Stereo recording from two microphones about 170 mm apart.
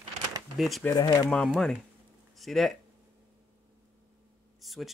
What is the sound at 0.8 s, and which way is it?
Speech, 20° left (ahead or behind).